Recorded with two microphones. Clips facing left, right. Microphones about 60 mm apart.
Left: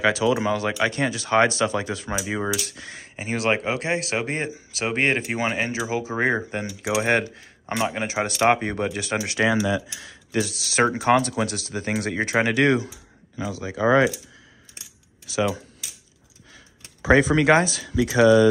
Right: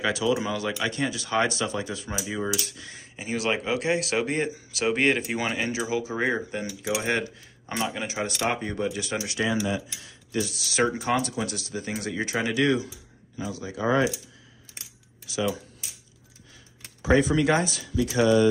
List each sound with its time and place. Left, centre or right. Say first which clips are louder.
0.0 s speech: left 4 dB; left
2.2 s speech: left 2 dB; left
2.7 s speech: left 4 dB; left
3.2 s speech: left 4 dB; left
3.6 s speech: left 1 dB; left
9.7 s speech: left 4 dB; left
13.4 s speech: left 4 dB; left
15.2 s speech: left 4 dB; left
17.1 s speech: left 4 dB; left